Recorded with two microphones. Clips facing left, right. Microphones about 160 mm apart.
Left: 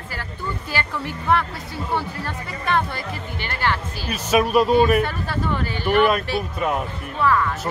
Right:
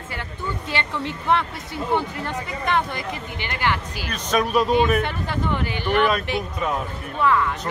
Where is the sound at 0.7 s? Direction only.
25° right (ahead or behind).